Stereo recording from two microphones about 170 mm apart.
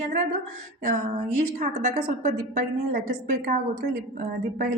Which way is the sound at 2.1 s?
45° right (ahead or behind).